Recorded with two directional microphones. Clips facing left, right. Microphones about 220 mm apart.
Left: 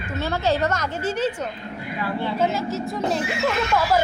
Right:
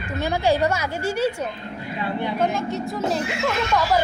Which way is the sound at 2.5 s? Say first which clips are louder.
Even; centre (ahead or behind).